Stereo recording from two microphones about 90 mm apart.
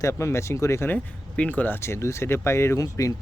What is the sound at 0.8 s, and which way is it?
Speech, 15° left (ahead or behind).